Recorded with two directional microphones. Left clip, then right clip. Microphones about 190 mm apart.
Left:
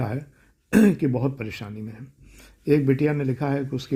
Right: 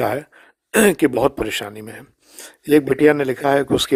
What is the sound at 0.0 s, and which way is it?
Speech, 35° right (ahead or behind).